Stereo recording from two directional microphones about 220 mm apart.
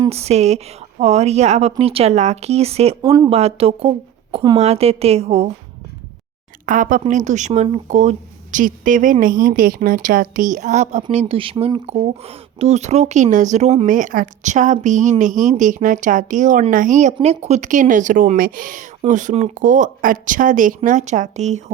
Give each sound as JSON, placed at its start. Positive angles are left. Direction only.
{"t": 0.0, "sound": "a woman's voice", "side_deg": -30}
{"t": 3.0, "sound": "speech", "side_deg": -15}
{"t": 3.3, "sound": "a woman's voice", "side_deg": -25}
{"t": 6.7, "sound": "a woman's voice", "side_deg": -35}